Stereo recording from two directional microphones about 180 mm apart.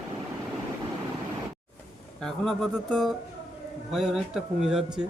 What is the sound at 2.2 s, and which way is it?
Speech, 5° left (ahead or behind).